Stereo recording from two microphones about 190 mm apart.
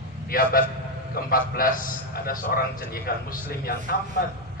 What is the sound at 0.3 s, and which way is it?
A man's voice, 50° left (ahead or behind).